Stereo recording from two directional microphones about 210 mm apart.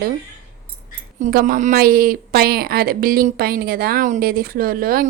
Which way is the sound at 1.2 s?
40° right (ahead or behind).